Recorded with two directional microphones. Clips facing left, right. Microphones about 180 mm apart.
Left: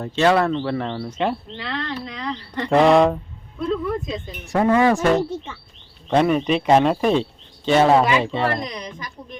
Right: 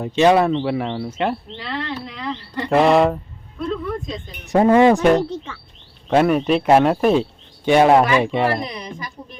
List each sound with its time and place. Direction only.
0.0 s speech: 15° right (ahead or behind); by 4.2 s 5° left (ahead or behind)
4.4 s speech: 25° right (ahead or behind)
5.1 s speech: 10° left (ahead or behind)
6.1 s a woman's voice: 5° right (ahead or behind)